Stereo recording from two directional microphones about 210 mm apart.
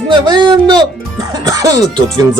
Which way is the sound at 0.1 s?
20° right (ahead or behind).